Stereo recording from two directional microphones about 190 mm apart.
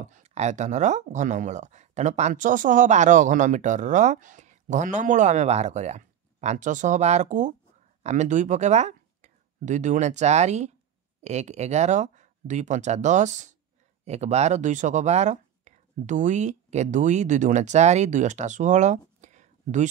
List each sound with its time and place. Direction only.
0.1 s speech: 35° right (ahead or behind)